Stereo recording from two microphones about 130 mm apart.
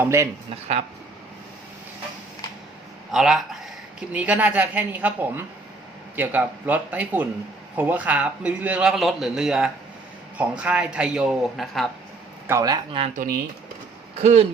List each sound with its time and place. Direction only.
0.0 s speech: 20° right (ahead or behind)
3.1 s a man's voice: 5° right (ahead or behind)
12.5 s speech: 25° right (ahead or behind)
13.1 s speech: 90° right
14.2 s speech: 55° right (ahead or behind)